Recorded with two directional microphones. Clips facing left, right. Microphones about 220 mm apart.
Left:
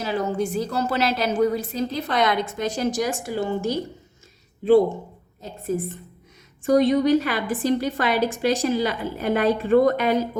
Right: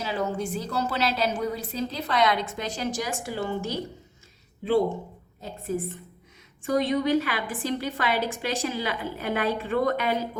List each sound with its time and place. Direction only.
0.0 s a woman's voice: 45° left (ahead or behind)
6.7 s a woman's voice: 40° left (ahead or behind)